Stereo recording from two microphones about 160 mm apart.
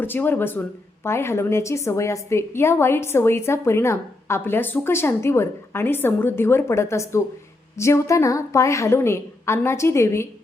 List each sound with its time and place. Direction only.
0.0 s a woman's voice: 10° left (ahead or behind)